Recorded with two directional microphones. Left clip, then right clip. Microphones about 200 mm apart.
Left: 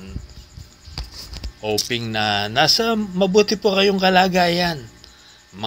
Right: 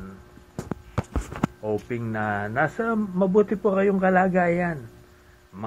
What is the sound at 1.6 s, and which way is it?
Speech, 25° left (ahead or behind).